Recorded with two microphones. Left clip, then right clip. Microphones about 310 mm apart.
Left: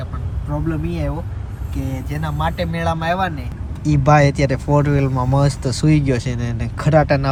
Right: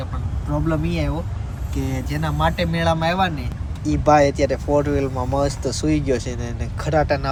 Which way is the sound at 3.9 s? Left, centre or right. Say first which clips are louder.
Left 1 dB; left.